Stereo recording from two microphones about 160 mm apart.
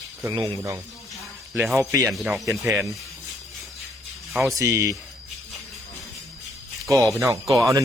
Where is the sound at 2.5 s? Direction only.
20° right (ahead or behind).